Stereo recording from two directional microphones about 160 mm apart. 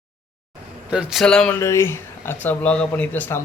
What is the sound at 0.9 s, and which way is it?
Speech, 5° right (ahead or behind).